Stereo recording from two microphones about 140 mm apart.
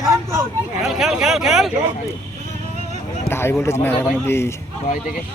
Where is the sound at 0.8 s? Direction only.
5° right (ahead or behind).